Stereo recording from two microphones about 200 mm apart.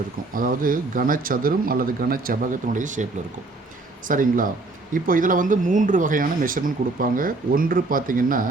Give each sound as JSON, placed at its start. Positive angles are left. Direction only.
{"t": 0.3, "sound": "speech", "side_deg": -45}